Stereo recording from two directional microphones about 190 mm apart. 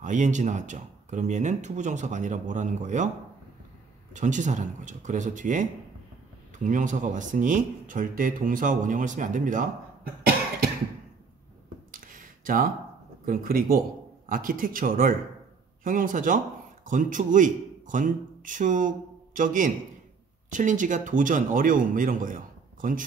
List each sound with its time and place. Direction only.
0.0 s speech: 40° right (ahead or behind)
4.1 s speech: 40° right (ahead or behind)
11.9 s a sound: 45° right (ahead or behind)
13.2 s speech: 50° right (ahead or behind)